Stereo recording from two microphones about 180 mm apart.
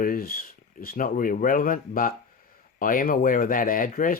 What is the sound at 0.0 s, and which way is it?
Speech, 55° left (ahead or behind).